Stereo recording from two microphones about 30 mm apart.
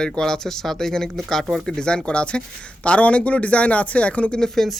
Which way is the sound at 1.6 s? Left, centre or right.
Left.